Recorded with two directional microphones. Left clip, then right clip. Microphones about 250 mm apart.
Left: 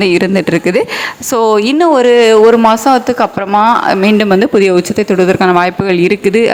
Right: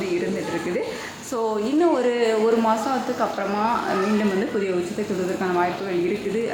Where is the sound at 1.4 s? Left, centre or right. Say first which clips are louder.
Left 12 dB; left.